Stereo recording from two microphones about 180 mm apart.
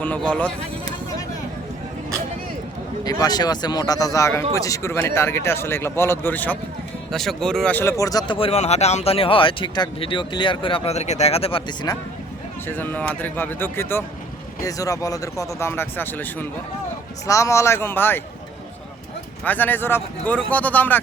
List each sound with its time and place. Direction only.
0.0 s speech: 10° left (ahead or behind)
3.0 s speech: 20° left (ahead or behind)
12.6 s speech: 10° left (ahead or behind)
19.5 s speech: 10° left (ahead or behind)